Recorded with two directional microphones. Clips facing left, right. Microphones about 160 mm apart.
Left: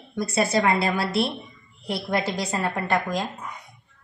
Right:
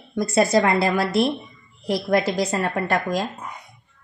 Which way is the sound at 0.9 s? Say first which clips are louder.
Right 4 dB; 40° right (ahead or behind).